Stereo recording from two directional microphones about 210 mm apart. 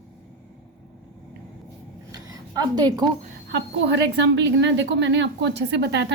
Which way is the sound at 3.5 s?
55° right (ahead or behind).